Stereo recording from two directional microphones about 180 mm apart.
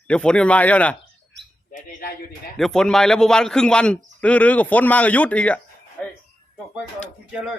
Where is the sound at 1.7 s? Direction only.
50° left (ahead or behind).